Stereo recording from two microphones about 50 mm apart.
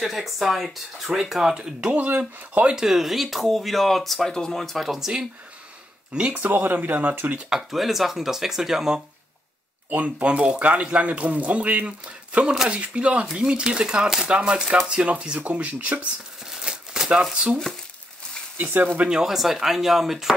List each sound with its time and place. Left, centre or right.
0.0 s speech: centre
1.5 s speech: right
2.0 s speech: right
2.6 s speech: centre
4.8 s speech: centre
6.1 s speech: right
6.5 s speech: right
7.3 s speech: centre
7.7 s speech: centre
9.8 s speech: right
16.4 s crumpling: centre
18.6 s speech: right
19.0 s speech: centre